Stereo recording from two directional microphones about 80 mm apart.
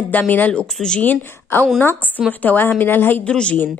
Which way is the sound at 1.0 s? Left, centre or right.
Left.